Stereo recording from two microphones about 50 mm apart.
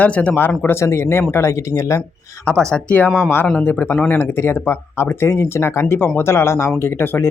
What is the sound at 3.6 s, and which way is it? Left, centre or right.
Speech, left.